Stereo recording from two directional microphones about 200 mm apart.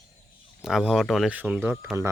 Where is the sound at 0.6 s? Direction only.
Centre (ahead or behind).